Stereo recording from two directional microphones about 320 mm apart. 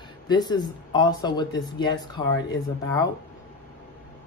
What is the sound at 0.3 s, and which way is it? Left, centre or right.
Speech, centre.